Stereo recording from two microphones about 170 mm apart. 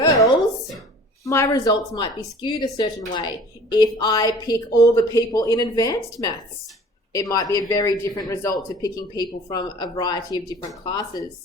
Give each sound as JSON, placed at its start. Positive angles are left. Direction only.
{"t": 1.2, "sound": "speech", "side_deg": 20}